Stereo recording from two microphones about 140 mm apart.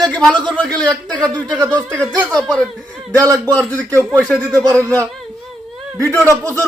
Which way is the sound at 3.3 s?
25° right (ahead or behind).